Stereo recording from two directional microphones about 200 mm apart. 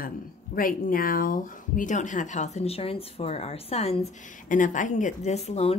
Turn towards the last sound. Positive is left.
turn(degrees=30)  # may be behind; listen again after turning